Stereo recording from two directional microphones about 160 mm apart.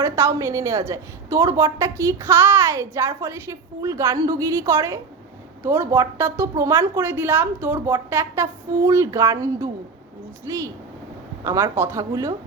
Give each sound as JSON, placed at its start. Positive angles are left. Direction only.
{"t": 0.0, "sound": "a woman's voice", "side_deg": -20}